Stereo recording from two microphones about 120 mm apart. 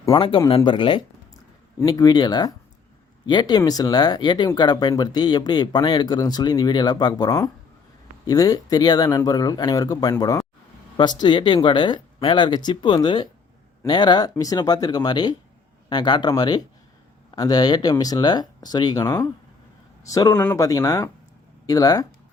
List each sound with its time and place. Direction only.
0.0 s speech: 40° left (ahead or behind)